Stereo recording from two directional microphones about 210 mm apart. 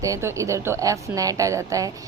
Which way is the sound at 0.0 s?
15° right (ahead or behind).